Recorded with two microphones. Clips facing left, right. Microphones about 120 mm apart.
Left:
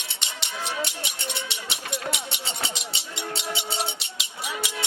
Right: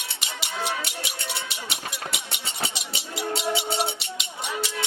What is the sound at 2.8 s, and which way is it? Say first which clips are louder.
Cowbell: right 3 dB; centre (ahead or behind).